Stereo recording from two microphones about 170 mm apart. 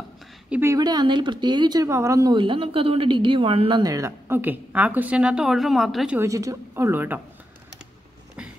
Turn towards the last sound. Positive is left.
turn(degrees=-10)  # may be behind; listen again after turning